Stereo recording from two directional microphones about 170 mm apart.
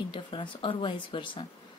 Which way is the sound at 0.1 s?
30° left (ahead or behind).